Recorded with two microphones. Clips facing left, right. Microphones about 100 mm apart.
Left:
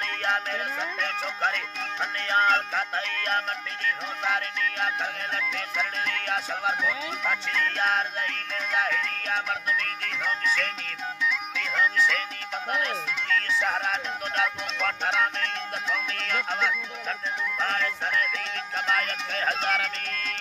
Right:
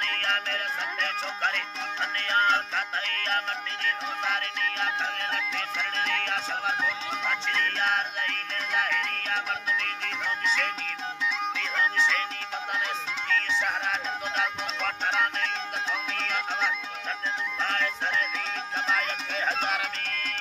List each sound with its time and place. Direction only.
0.0 s music: 10° left (ahead or behind)
2.1 s music: 5° left (ahead or behind)
5.3 s music: 5° left (ahead or behind)
10.4 s music: 20° right (ahead or behind)
11.5 s music: centre (ahead or behind)
13.8 s music: centre (ahead or behind)
17.6 s music: 5° left (ahead or behind)